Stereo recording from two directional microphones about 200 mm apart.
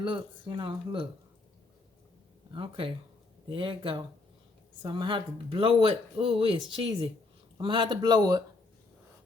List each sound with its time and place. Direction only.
0.0 s speech: 25° right (ahead or behind)
2.5 s speech: 25° right (ahead or behind)